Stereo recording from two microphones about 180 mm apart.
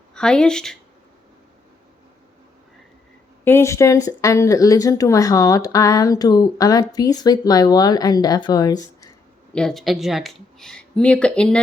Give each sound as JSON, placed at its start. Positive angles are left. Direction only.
{"t": 0.1, "sound": "speech", "side_deg": 5}
{"t": 3.4, "sound": "speech", "side_deg": 15}
{"t": 9.5, "sound": "speech", "side_deg": 5}